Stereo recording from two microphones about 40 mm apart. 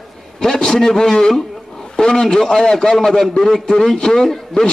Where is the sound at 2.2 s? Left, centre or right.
Centre.